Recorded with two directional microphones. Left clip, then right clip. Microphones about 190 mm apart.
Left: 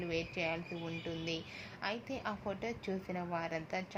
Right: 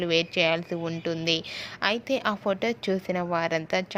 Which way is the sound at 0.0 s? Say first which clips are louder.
Right 14 dB; 45° right (ahead or behind).